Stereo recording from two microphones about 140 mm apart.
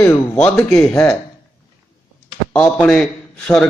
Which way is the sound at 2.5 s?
5° left (ahead or behind).